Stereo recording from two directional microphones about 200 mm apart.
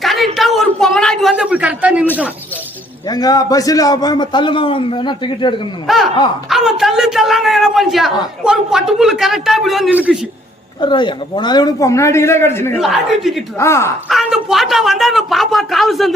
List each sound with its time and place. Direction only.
0.0 s a sound: centre (ahead or behind)
3.1 s a man's voice: 20° left (ahead or behind)
5.9 s a man's voice: centre (ahead or behind)
10.8 s a man's voice: 25° left (ahead or behind)
12.8 s a man's voice: centre (ahead or behind)
13.6 s a man's voice: 15° left (ahead or behind)
14.1 s a man's voice: centre (ahead or behind)